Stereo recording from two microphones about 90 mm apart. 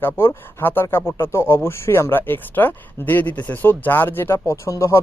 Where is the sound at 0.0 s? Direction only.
25° left (ahead or behind).